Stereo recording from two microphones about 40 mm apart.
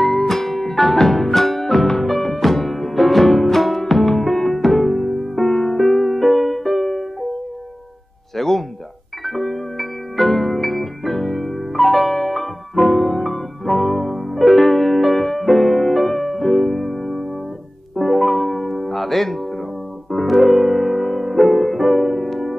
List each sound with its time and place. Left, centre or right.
0.3 s music: centre
8.4 s music: centre